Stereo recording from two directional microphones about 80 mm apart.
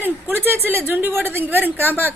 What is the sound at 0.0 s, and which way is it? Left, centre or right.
A woman's voice, right.